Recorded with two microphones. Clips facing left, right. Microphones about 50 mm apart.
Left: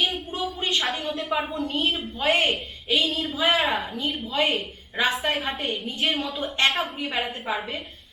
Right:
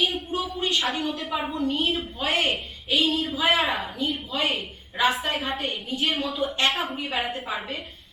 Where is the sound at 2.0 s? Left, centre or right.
Left.